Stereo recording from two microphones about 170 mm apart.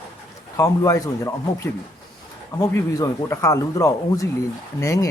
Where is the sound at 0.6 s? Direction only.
15° left (ahead or behind).